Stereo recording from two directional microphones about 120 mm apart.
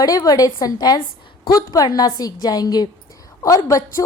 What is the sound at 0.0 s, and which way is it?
A woman's voice, 30° left (ahead or behind).